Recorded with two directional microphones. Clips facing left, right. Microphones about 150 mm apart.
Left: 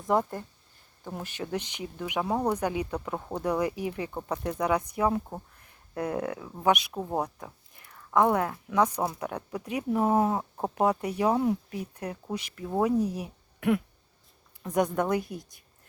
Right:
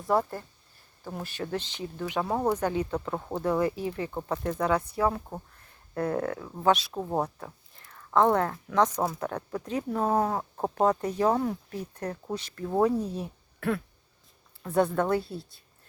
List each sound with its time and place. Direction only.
0.0 s speech: 20° left (ahead or behind)
2.3 s speech: 5° right (ahead or behind)
2.6 s speech: 15° left (ahead or behind)
6.9 s speech: centre (ahead or behind)
7.2 s speech: 15° left (ahead or behind)